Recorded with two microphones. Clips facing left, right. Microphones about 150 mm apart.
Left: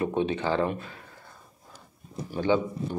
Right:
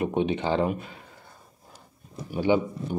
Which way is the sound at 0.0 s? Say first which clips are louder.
Right 1 dB; 15° right (ahead or behind).